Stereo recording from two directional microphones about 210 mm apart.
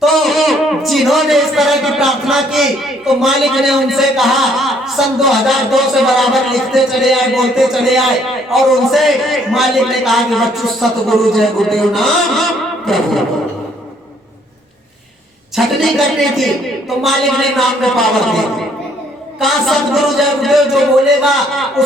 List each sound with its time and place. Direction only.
0.0 s a man's voice: centre (ahead or behind)
15.5 s a man's voice: centre (ahead or behind)